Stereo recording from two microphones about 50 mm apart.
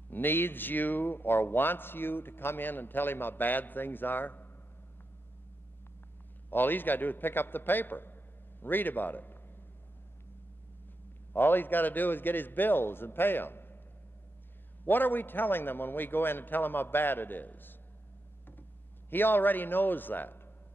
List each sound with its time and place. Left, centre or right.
0.1 s speech: left
6.5 s a man's voice: left
11.3 s speech: left
14.9 s a man's voice: left